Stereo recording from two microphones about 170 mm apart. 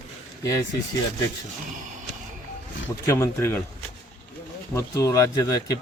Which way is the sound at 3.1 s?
15° left (ahead or behind).